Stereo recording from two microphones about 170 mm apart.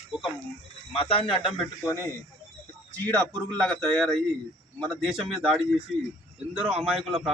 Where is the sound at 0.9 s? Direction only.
35° left (ahead or behind).